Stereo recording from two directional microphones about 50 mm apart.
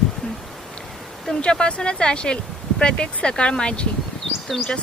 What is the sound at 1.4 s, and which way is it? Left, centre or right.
Speech, centre.